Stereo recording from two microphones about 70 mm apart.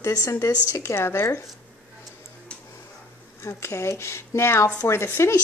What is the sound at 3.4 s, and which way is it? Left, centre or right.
Speech, left.